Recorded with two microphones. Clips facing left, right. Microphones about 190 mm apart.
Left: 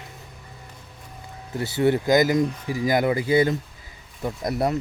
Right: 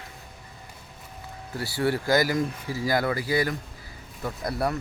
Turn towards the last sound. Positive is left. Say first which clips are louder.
# left 4 dB
turn(degrees=20)  # may be behind; listen again after turning